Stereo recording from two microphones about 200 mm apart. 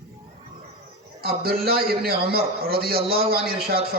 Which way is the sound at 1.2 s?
50° right (ahead or behind).